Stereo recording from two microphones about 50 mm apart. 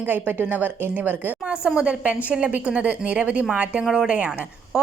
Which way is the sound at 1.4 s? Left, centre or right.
Right.